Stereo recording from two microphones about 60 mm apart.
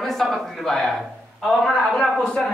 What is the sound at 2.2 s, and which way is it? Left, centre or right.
Speech, centre.